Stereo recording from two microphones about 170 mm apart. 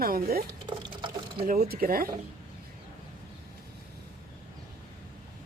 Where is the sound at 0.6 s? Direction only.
25° right (ahead or behind).